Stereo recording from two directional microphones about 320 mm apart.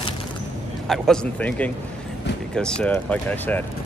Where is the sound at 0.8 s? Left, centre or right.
Centre.